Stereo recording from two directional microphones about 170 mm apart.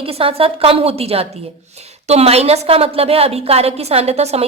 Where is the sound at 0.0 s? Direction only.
35° right (ahead or behind).